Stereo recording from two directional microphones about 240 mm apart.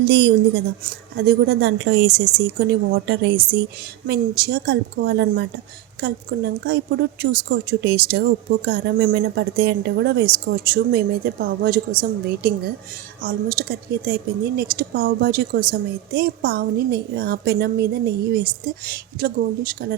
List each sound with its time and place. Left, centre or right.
0.0 s a woman's voice: right